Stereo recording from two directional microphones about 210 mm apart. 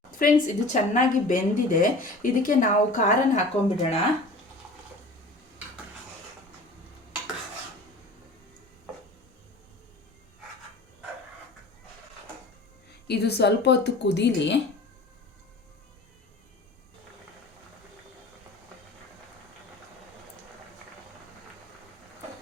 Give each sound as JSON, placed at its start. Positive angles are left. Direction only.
{"t": 0.1, "sound": "speech", "side_deg": 40}
{"t": 13.1, "sound": "speech", "side_deg": 50}